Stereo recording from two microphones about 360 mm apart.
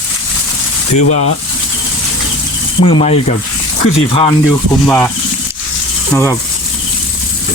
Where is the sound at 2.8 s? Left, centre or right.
Centre.